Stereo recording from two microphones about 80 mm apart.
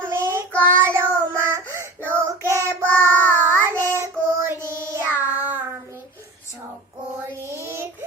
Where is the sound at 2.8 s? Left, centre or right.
Left.